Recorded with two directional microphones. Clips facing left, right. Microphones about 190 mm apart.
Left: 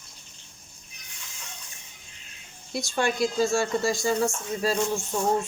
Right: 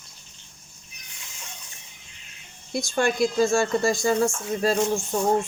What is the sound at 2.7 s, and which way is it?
Speech, 50° right (ahead or behind).